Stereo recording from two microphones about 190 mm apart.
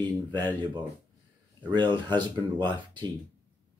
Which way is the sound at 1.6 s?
25° right (ahead or behind).